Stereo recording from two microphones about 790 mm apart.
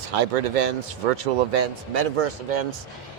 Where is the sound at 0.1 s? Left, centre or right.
Right.